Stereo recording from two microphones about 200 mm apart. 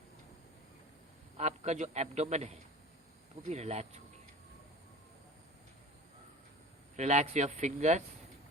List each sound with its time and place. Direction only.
1.4 s a man's voice: 35° right (ahead or behind)
6.9 s a man's voice: 35° right (ahead or behind)